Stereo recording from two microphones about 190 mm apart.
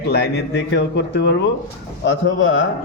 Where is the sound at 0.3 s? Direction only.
65° left (ahead or behind).